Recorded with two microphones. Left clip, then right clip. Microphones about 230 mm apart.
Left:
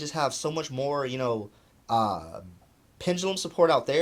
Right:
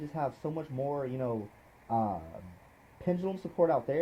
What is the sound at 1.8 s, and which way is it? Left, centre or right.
Speech, left.